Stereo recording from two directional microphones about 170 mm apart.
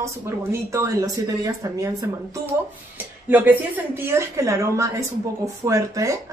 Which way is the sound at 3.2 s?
10° right (ahead or behind).